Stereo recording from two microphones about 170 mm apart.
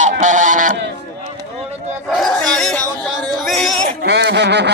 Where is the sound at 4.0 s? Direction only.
80° right.